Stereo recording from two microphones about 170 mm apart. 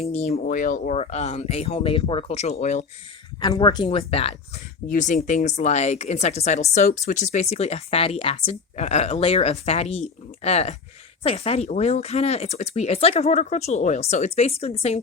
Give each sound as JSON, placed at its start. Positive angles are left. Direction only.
{"t": 0.0, "sound": "speech", "side_deg": 40}
{"t": 0.3, "sound": "speech", "side_deg": 55}
{"t": 3.4, "sound": "speech", "side_deg": 25}
{"t": 4.9, "sound": "speech", "side_deg": 45}